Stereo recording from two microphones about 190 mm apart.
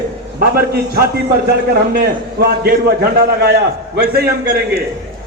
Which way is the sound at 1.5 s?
55° right (ahead or behind).